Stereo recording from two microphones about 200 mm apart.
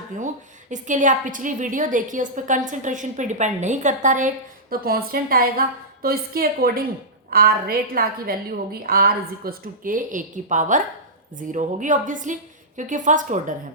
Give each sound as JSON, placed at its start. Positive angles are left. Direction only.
{"t": 0.7, "sound": "a woman's voice", "side_deg": -40}